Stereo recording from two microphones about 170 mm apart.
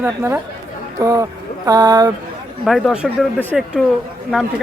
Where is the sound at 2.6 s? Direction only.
Centre (ahead or behind).